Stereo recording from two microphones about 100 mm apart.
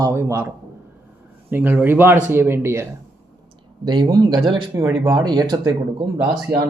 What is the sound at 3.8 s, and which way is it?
Speech, 50° right (ahead or behind).